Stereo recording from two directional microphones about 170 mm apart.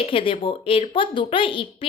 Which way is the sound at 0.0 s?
30° left (ahead or behind).